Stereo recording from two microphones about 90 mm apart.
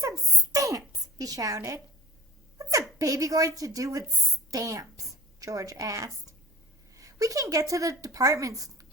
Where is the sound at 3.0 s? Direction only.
40° right (ahead or behind).